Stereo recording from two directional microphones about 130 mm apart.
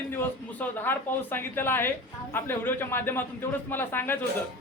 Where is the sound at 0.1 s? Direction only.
15° left (ahead or behind).